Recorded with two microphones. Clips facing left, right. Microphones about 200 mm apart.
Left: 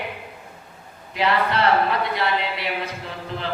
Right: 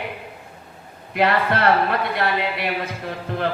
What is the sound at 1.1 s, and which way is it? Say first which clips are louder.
Speech: right 2 dB; 55° right (ahead or behind).